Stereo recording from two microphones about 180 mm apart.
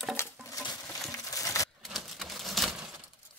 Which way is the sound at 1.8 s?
Centre (ahead or behind).